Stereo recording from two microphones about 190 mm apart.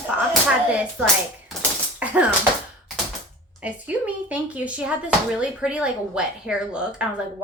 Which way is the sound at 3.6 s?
10° right (ahead or behind).